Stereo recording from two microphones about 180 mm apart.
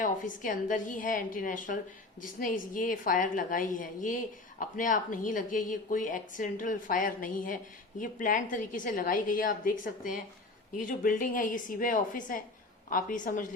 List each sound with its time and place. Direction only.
0.0 s a woman's voice: 45° left (ahead or behind)